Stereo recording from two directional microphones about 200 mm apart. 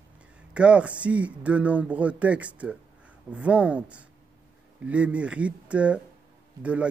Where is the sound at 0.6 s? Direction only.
5° right (ahead or behind).